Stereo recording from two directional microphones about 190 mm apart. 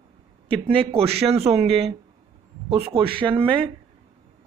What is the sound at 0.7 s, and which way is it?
Speech, 30° right (ahead or behind).